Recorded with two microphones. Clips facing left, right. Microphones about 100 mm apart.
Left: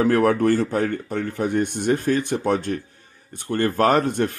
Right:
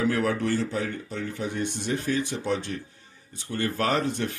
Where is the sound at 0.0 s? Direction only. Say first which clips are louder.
Left 7 dB; 50° left (ahead or behind).